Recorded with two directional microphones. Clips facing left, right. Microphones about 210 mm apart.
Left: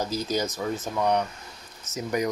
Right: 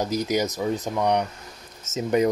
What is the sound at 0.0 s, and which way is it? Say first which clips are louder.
Speech: right 4 dB; 15° right (ahead or behind).